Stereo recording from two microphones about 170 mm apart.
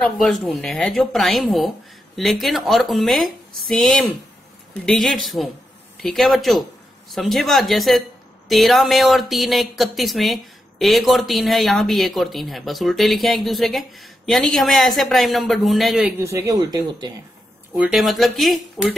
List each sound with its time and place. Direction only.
0.0 s speech: centre (ahead or behind)
16.3 s speech: 15° right (ahead or behind)
17.7 s speech: 5° right (ahead or behind)